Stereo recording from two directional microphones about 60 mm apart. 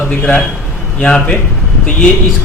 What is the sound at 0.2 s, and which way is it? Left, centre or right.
A man's voice, left.